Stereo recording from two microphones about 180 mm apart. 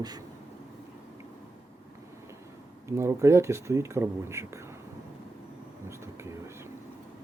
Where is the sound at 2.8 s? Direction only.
15° right (ahead or behind).